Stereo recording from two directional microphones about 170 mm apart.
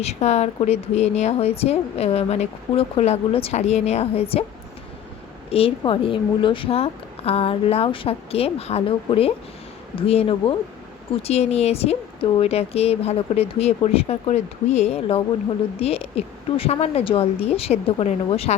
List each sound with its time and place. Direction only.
0.0 s a woman's voice: 40° left (ahead or behind)
5.5 s a woman's voice: 35° left (ahead or behind)